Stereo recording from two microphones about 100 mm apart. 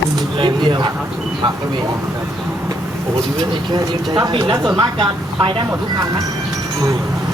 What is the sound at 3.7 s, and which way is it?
Speech, 45° right (ahead or behind).